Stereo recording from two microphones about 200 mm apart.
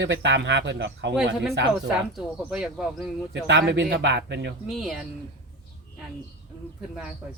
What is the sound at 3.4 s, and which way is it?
Speech, 65° right (ahead or behind).